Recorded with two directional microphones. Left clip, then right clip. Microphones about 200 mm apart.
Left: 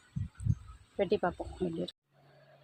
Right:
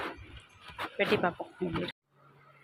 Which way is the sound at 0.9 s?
5° right (ahead or behind).